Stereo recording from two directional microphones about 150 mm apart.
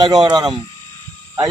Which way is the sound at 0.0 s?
30° right (ahead or behind).